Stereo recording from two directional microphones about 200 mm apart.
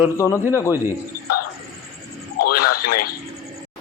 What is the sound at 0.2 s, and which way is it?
Speech, 15° left (ahead or behind).